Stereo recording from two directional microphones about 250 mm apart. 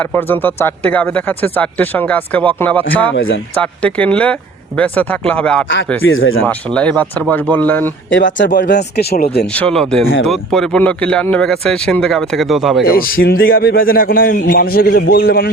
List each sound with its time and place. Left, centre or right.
0.1 s speech: centre
3.1 s speech: left
3.6 s speech: centre
6.1 s speech: left
6.4 s speech: centre
8.4 s a man's voice: left
9.6 s speech: centre
13.0 s a man's voice: left